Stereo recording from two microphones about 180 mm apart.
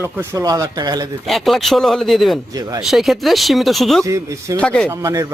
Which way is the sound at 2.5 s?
20° right (ahead or behind).